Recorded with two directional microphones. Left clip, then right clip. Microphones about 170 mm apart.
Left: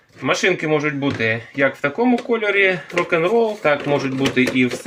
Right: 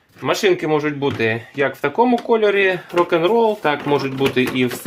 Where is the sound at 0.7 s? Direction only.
40° right (ahead or behind); by 4.7 s 55° right (ahead or behind).